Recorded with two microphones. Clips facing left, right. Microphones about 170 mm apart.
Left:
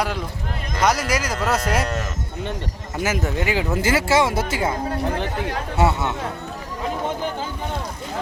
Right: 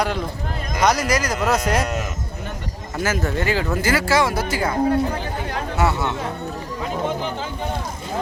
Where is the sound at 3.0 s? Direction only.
15° left (ahead or behind).